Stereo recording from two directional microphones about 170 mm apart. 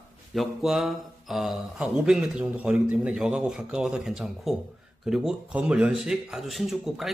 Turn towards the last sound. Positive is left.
turn(degrees=0)  # may be behind; listen again after turning